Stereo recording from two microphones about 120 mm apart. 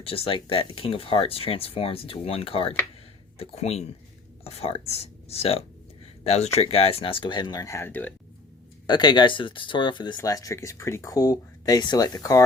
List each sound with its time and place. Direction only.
0.0 s speech: 50° left (ahead or behind); by 8.1 s 15° left (ahead or behind)
8.9 s speech: 35° left (ahead or behind)
10.2 s speech: 30° left (ahead or behind)